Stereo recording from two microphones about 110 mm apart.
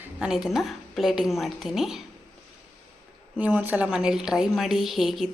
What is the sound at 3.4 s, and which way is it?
Speech, 15° right (ahead or behind).